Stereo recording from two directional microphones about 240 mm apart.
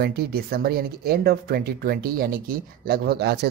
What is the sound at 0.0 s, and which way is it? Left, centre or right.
Speech, right.